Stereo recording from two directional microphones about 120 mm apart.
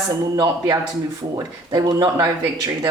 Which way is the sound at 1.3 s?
35° right (ahead or behind).